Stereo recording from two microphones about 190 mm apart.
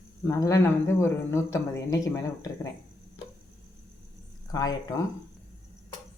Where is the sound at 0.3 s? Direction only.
15° left (ahead or behind).